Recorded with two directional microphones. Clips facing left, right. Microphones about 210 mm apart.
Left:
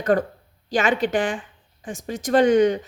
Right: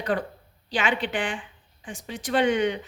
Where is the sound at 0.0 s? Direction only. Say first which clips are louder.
Left 7 dB; 45° left (ahead or behind).